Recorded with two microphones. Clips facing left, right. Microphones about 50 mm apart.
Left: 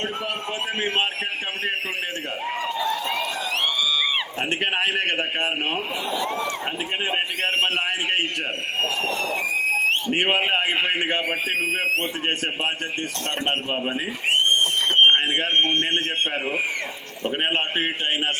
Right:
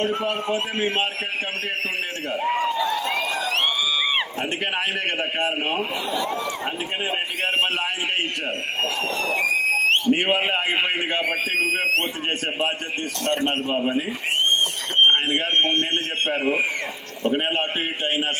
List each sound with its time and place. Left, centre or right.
4.6 s a man's voice: left
8.8 s speech: right
13.2 s a man's voice: left
14.6 s speech: left